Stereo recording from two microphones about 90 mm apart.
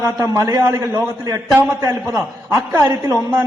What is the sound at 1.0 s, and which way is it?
Speech, 25° right (ahead or behind).